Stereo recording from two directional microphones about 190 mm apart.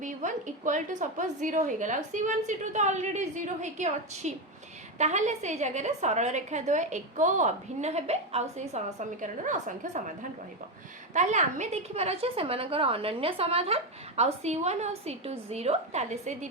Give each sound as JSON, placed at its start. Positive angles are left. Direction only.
{"t": 0.0, "sound": "a woman's voice", "side_deg": -40}
{"t": 11.1, "sound": "a woman's voice", "side_deg": -40}